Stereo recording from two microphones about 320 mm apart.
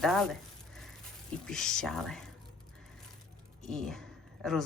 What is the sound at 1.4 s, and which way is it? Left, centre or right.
Speech, centre.